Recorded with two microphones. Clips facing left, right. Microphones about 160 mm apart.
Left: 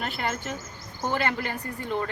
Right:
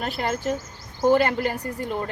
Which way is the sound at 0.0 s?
35° right (ahead or behind).